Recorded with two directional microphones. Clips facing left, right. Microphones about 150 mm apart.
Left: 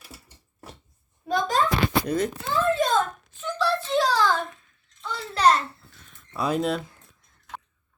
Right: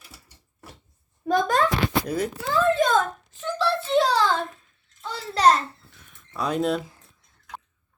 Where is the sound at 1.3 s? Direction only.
55° right (ahead or behind).